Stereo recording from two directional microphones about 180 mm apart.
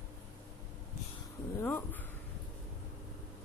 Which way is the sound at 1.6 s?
10° left (ahead or behind).